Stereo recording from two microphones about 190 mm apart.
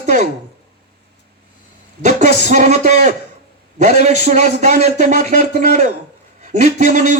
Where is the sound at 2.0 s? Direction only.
40° right (ahead or behind).